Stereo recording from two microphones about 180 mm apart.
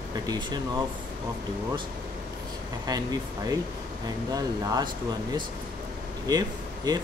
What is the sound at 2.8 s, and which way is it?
Speech, 20° right (ahead or behind).